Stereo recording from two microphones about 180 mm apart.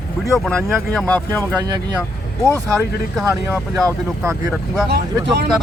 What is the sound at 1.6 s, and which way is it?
Speech, 20° right (ahead or behind).